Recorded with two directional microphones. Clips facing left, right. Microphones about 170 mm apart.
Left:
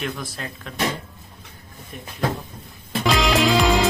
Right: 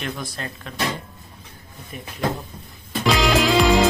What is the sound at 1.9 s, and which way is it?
Speech, 5° right (ahead or behind).